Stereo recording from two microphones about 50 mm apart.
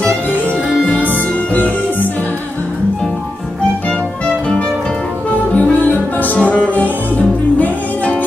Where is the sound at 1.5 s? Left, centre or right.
Left.